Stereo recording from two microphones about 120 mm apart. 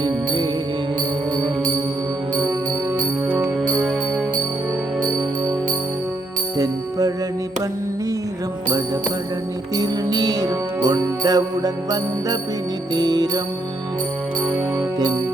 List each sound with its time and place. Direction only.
9.7 s music: 30° right (ahead or behind)
14.8 s music: 35° right (ahead or behind)